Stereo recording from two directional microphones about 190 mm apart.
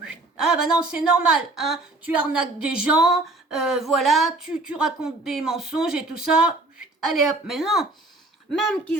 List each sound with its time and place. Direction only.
0.0 s speech: 5° right (ahead or behind)